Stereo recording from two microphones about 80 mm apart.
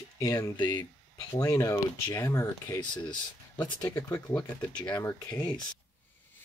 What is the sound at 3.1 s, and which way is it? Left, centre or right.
Speech, left.